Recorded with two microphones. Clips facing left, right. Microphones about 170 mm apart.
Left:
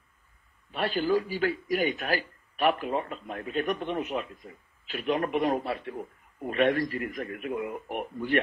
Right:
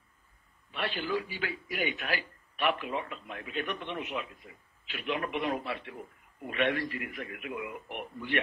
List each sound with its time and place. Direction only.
0.7 s a man's voice: 40° left (ahead or behind)